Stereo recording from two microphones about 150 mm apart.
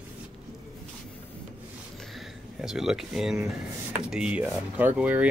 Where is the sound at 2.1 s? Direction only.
5° right (ahead or behind).